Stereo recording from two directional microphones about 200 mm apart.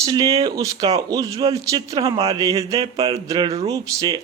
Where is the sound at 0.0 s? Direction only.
20° right (ahead or behind).